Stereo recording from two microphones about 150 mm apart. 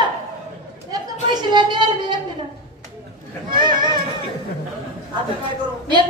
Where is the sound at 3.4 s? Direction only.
30° right (ahead or behind).